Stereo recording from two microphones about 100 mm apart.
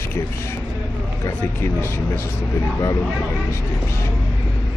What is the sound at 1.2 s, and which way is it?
Speech, 25° left (ahead or behind).